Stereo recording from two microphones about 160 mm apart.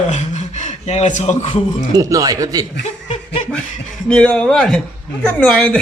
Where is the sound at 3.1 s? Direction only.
40° left (ahead or behind).